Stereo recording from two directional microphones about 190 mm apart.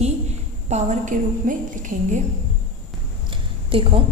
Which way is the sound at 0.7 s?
40° right (ahead or behind).